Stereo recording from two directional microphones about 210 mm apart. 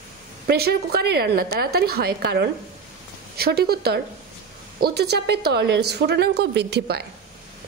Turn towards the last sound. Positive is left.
turn(degrees=-50)  # may be behind; listen again after turning